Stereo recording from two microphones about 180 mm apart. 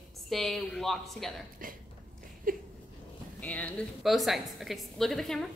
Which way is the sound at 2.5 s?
50° right (ahead or behind).